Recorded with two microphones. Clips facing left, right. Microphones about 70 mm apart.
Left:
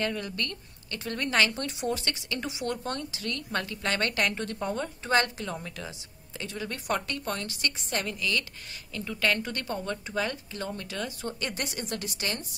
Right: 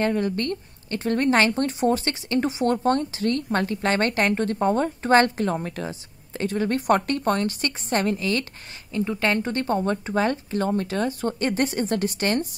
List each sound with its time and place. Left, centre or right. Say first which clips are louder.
0.0 s speech: right 8 dB; right